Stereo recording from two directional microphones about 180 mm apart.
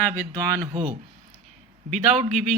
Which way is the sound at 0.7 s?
40° right (ahead or behind).